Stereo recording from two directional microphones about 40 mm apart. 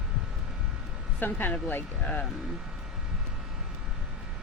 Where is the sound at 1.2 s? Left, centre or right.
Left.